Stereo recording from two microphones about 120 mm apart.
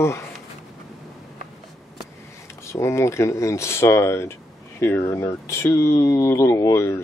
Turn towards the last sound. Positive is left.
turn(degrees=25)  # may be behind; listen again after turning